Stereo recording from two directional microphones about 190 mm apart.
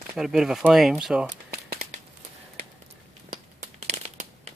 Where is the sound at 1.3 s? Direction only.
50° right (ahead or behind).